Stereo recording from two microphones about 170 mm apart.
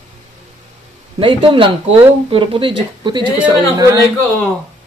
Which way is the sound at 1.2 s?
30° right (ahead or behind).